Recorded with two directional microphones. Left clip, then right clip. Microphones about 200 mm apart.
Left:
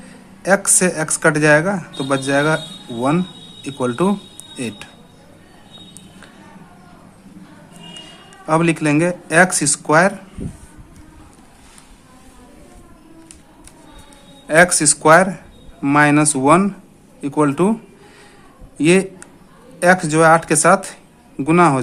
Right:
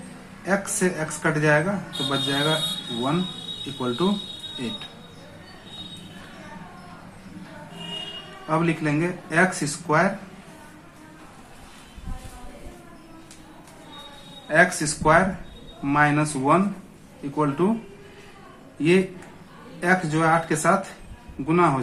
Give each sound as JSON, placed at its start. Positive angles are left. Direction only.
{"t": 0.4, "sound": "speech", "side_deg": 55}
{"t": 3.8, "sound": "speech", "side_deg": 55}
{"t": 8.4, "sound": "speech", "side_deg": 55}
{"t": 14.4, "sound": "speech", "side_deg": 55}
{"t": 18.8, "sound": "speech", "side_deg": 55}